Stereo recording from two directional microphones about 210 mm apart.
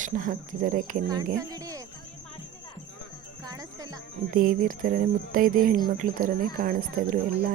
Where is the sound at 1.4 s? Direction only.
15° right (ahead or behind).